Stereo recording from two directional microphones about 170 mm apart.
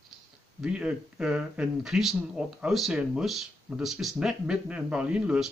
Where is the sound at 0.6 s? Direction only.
5° right (ahead or behind).